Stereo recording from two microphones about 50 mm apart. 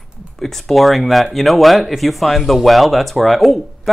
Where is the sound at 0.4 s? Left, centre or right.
Centre.